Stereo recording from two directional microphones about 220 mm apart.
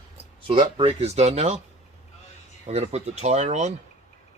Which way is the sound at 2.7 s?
30° right (ahead or behind).